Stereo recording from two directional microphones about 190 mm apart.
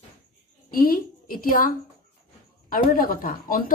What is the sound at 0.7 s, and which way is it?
A woman's voice, 50° left (ahead or behind).